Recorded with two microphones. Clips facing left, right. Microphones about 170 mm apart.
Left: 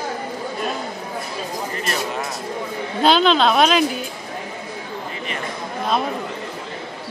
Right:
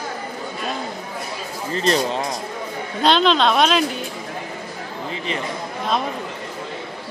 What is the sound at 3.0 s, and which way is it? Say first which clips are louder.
Speech: left 1 dB; centre (ahead or behind).